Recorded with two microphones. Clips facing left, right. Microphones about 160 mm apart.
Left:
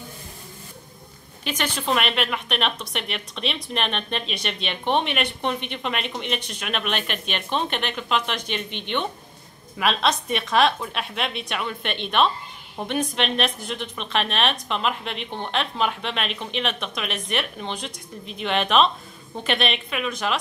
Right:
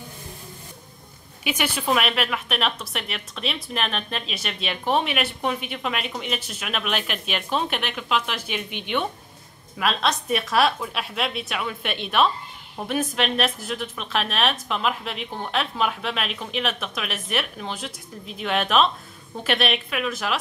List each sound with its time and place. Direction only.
1.4 s a woman's voice: 10° right (ahead or behind)